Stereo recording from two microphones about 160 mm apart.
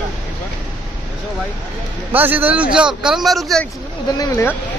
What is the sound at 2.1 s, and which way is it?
A man's voice, 10° right (ahead or behind).